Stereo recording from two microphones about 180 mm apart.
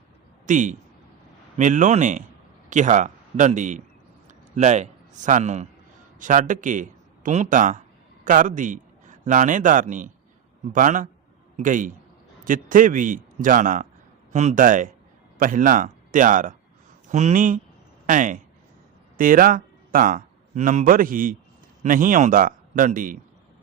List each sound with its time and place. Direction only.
0.4 s a man's voice: 45° right (ahead or behind)